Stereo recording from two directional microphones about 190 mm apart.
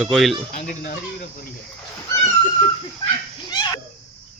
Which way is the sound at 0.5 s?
40° left (ahead or behind).